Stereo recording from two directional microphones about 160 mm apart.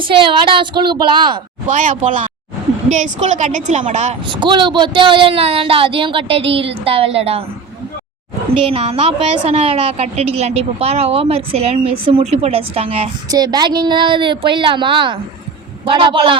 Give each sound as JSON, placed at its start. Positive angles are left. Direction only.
{"t": 0.0, "sound": "a woman's voice", "side_deg": -30}
{"t": 1.7, "sound": "a woman's voice", "side_deg": -50}
{"t": 4.3, "sound": "a woman's voice", "side_deg": -30}
{"t": 8.6, "sound": "a woman's voice", "side_deg": -35}
{"t": 13.3, "sound": "a woman's voice", "side_deg": -25}